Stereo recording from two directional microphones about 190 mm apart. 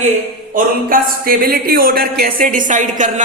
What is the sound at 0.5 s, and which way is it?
Speech, 50° right (ahead or behind).